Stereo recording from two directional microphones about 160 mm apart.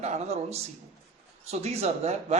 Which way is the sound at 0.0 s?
45° right (ahead or behind).